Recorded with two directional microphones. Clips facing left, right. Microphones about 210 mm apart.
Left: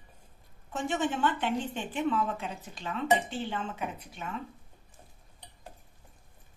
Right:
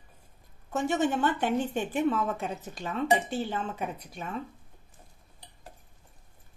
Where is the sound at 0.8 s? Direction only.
40° right (ahead or behind).